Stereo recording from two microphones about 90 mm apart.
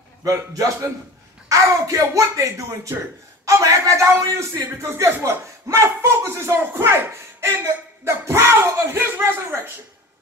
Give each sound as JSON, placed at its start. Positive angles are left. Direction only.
{"t": 0.2, "sound": "speech", "side_deg": -40}